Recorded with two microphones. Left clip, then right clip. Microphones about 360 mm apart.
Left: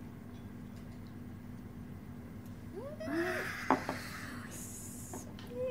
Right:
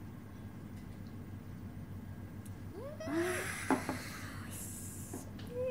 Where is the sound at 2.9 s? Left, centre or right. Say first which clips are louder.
Even; centre.